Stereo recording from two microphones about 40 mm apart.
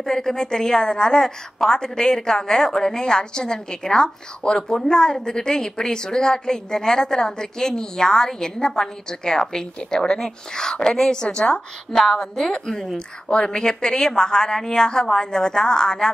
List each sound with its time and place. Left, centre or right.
0.0 s a woman's voice: centre
11.9 s a woman's voice: centre